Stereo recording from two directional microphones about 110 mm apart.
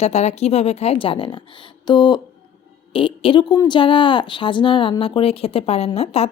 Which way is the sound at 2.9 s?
50° left (ahead or behind).